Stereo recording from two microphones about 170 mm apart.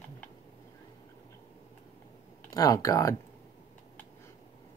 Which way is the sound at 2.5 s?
20° left (ahead or behind).